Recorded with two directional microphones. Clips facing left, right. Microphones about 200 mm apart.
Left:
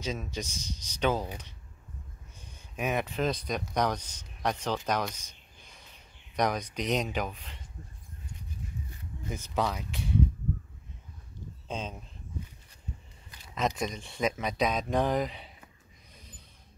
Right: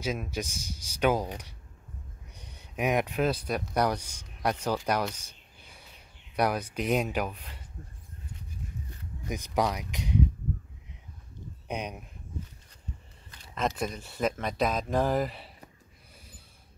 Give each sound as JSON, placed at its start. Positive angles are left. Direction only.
{"t": 0.0, "sound": "speech", "side_deg": -10}
{"t": 2.5, "sound": "speech", "side_deg": -15}
{"t": 9.3, "sound": "speech", "side_deg": -15}
{"t": 11.6, "sound": "speech", "side_deg": -15}
{"t": 13.6, "sound": "speech", "side_deg": 0}